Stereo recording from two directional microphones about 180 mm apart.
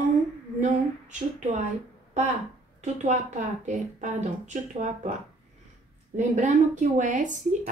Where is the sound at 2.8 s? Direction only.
40° right (ahead or behind).